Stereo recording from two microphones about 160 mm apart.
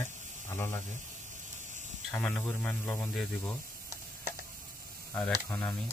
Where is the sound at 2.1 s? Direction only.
5° left (ahead or behind).